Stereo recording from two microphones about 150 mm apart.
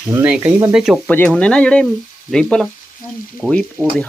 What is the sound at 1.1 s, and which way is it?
Speech, 10° left (ahead or behind).